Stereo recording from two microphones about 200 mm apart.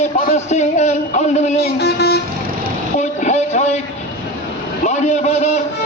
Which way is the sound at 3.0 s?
35° left (ahead or behind).